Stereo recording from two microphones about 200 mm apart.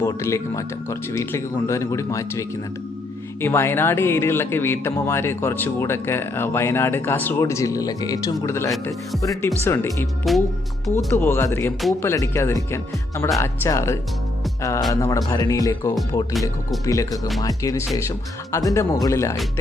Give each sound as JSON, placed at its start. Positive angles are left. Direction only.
{"t": 0.0, "sound": "speech", "side_deg": 15}